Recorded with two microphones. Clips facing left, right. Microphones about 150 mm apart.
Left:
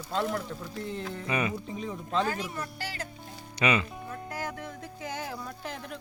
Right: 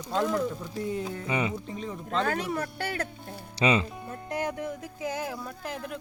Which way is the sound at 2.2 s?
60° right (ahead or behind).